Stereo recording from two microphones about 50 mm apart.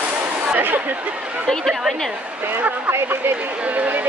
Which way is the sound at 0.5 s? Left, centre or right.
Right.